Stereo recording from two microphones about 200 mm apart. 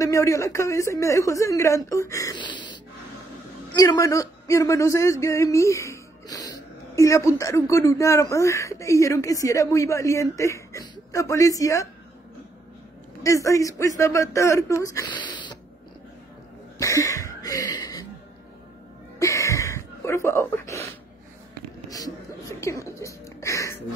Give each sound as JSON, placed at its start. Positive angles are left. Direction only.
{"t": 0.0, "sound": "a man's voice", "side_deg": 15}
{"t": 3.7, "sound": "a man's voice", "side_deg": 15}
{"t": 13.2, "sound": "a man's voice", "side_deg": 15}
{"t": 16.7, "sound": "cough", "side_deg": 15}
{"t": 19.1, "sound": "a sound", "side_deg": 15}
{"t": 22.6, "sound": "music", "side_deg": 15}